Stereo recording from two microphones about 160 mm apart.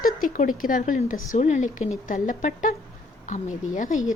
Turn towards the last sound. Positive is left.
turn(degrees=50)  # may be behind; listen again after turning